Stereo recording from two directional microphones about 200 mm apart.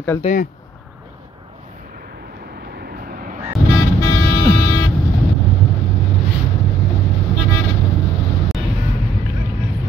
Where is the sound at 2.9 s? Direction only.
45° right (ahead or behind).